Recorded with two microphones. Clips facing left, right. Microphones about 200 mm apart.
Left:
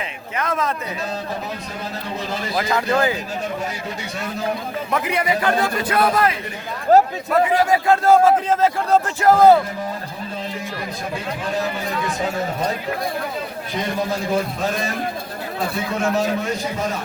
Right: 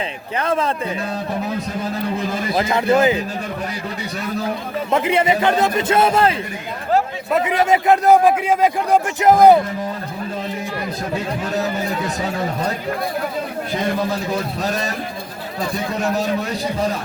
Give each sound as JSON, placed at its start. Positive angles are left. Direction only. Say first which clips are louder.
{"t": 0.3, "sound": "a man's voice", "louder": "right 3 dB", "side_deg": -30}
{"t": 2.6, "sound": "a man's voice", "louder": "right 4 dB", "side_deg": -25}
{"t": 4.9, "sound": "a man's voice", "louder": "right 5 dB", "side_deg": -25}
{"t": 6.9, "sound": "chatter", "louder": "left 5 dB", "side_deg": 45}
{"t": 7.3, "sound": "a man's voice", "louder": "even", "side_deg": -20}